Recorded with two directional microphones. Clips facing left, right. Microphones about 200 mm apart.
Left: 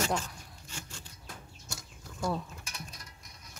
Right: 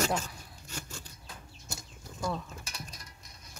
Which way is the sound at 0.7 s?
40° right (ahead or behind).